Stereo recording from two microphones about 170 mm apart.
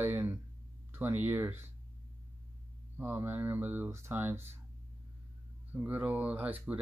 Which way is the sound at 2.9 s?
10° right (ahead or behind).